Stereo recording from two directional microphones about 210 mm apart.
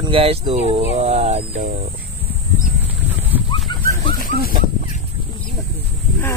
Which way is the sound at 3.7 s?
20° left (ahead or behind).